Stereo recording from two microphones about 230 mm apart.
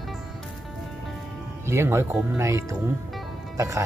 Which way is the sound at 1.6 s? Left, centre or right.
Centre.